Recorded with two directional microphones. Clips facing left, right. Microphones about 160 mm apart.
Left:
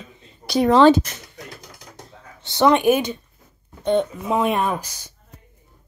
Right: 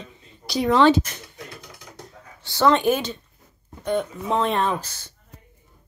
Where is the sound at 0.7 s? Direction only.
35° left (ahead or behind).